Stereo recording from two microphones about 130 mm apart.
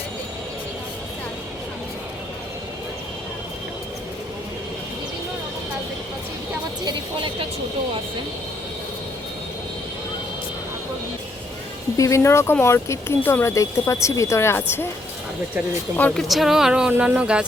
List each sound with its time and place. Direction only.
6.8 s a woman's voice: 40° right (ahead or behind)
11.9 s speech: 25° left (ahead or behind)
16.0 s speech: 10° left (ahead or behind)
16.2 s speech: centre (ahead or behind)